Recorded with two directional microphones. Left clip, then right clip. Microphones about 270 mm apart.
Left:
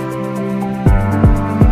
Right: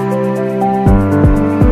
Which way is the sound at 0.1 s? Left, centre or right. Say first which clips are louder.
Right 6 dB; centre.